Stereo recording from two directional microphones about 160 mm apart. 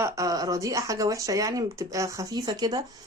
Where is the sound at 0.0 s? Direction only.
20° right (ahead or behind).